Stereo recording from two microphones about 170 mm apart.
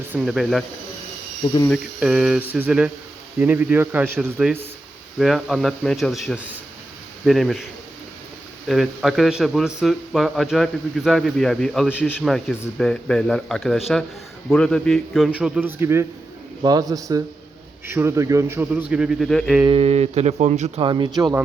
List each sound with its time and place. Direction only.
0.1 s speech: 5° right (ahead or behind)
2.0 s a man's voice: 5° right (ahead or behind)
8.6 s a man's voice: centre (ahead or behind)
19.6 s speech: 35° right (ahead or behind)
20.8 s speech: 30° right (ahead or behind)